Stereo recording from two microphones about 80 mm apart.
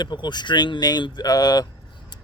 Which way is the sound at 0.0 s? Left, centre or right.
Left.